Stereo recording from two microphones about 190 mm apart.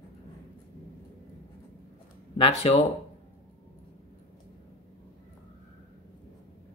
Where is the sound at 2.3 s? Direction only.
30° left (ahead or behind).